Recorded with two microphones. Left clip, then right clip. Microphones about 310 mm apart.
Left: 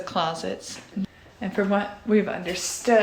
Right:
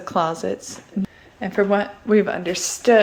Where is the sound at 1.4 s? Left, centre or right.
Centre.